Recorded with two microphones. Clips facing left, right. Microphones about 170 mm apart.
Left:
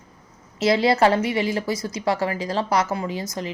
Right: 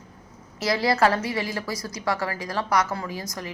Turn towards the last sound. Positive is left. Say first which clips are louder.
# left 5 dB
turn(degrees=25)  # may be behind; listen again after turning